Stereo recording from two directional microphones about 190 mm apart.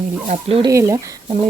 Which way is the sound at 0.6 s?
15° right (ahead or behind).